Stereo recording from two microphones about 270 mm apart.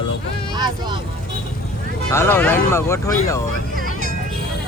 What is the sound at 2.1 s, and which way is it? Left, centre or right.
Speech, centre.